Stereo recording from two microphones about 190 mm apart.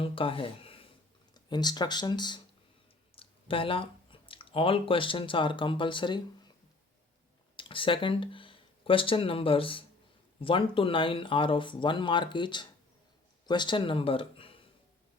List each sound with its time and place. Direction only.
0.0 s speech: 30° left (ahead or behind)
7.5 s speech: 25° left (ahead or behind)